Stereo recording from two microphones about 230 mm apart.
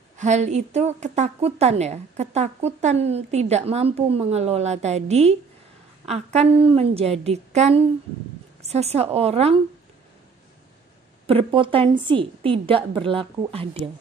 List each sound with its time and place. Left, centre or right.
0.2 s a woman's voice: right
11.2 s a woman's voice: right